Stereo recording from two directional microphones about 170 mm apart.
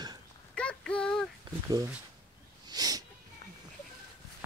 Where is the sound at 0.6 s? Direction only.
5° left (ahead or behind).